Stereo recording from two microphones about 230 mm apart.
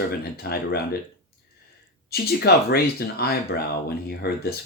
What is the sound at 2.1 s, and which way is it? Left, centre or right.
Speech, left.